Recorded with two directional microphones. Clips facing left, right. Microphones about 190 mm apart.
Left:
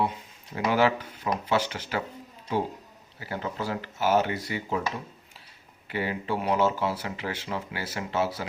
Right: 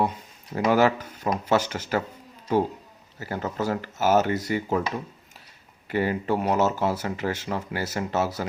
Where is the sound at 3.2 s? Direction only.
45° right (ahead or behind).